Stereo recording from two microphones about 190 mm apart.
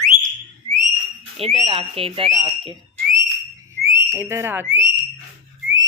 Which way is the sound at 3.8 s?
15° right (ahead or behind).